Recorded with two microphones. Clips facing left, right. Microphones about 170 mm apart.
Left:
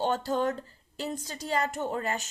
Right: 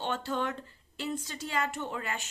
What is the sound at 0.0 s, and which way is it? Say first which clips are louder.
Speech: left 5 dB; 40° left (ahead or behind).